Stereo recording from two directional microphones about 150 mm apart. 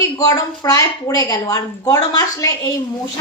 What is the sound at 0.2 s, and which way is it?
A woman's voice, 25° left (ahead or behind).